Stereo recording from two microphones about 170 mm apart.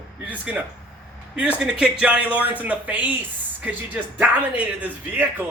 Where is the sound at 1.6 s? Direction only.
5° right (ahead or behind).